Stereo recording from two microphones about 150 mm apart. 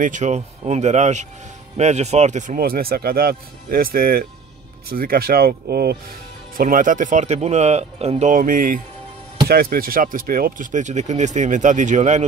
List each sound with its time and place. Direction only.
0.0 s speech: 55° right (ahead or behind); by 5.9 s 90° right
6.5 s speech: 65° right (ahead or behind)
9.5 s speech: 90° right; by 12.3 s 50° right (ahead or behind)